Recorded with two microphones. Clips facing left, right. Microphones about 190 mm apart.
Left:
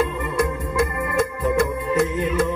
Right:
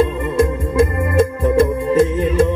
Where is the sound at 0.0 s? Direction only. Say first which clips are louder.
Right 6 dB; 25° right (ahead or behind).